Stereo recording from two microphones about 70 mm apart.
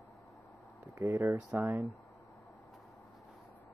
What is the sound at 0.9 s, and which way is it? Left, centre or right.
Speech, right.